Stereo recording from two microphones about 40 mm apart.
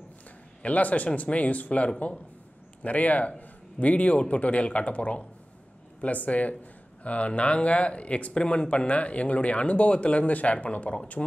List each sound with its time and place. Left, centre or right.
0.6 s speech: left
11.2 s speech: centre